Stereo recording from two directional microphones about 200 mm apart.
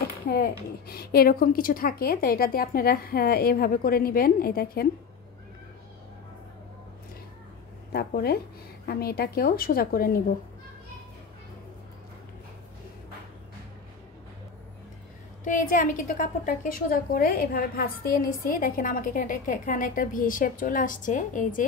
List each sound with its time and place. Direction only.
0.3 s a woman's voice: 50° left (ahead or behind)
7.9 s a woman's voice: 50° left (ahead or behind)
15.4 s a woman's voice: 40° left (ahead or behind)